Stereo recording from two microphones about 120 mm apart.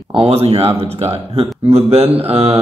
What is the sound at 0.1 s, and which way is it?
Speech, 50° right (ahead or behind).